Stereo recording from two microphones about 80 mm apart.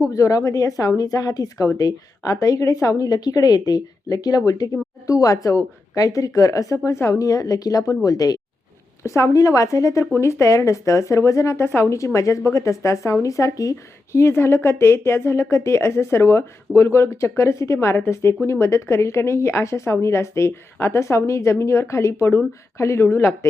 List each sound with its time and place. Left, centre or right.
0.1 s a woman's voice: left
9.0 s speech: left